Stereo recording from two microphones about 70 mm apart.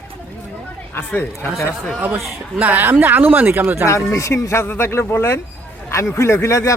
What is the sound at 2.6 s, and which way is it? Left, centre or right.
Speech, right.